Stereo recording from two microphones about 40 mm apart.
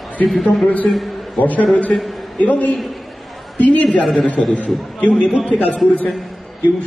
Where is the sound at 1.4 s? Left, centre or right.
Left.